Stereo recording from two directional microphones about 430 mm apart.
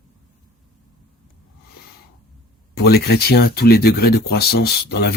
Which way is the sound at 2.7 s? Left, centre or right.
Left.